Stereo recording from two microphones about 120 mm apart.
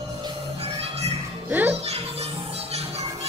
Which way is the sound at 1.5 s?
15° right (ahead or behind).